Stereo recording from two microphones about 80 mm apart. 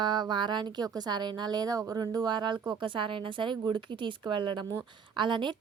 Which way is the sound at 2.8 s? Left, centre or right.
Right.